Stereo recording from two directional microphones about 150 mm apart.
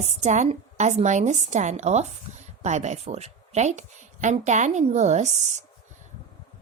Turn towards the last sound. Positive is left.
turn(degrees=-50)  # may be behind; listen again after turning